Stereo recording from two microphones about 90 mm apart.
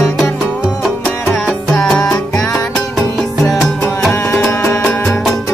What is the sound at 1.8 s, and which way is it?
Music, 10° left (ahead or behind).